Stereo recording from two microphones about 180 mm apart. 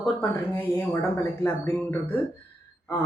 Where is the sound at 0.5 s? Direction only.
15° left (ahead or behind).